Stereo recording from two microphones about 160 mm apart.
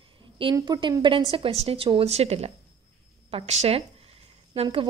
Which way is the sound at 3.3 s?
40° right (ahead or behind).